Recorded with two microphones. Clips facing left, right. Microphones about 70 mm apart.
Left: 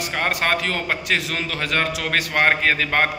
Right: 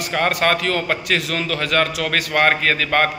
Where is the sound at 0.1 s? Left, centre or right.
Centre.